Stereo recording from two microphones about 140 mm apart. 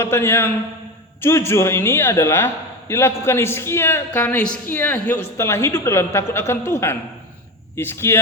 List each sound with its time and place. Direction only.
0.0 s a man's voice: 15° left (ahead or behind)